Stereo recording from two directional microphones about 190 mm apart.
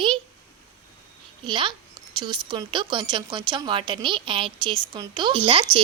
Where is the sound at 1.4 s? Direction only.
25° right (ahead or behind).